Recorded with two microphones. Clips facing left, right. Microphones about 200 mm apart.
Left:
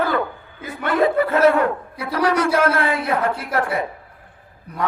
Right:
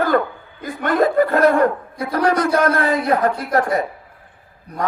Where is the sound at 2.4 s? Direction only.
40° right (ahead or behind).